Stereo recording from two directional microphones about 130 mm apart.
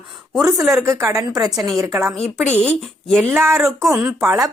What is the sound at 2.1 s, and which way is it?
Speech, 55° left (ahead or behind).